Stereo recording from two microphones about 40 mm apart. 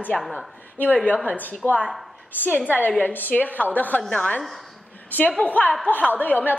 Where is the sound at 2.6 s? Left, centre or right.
Left.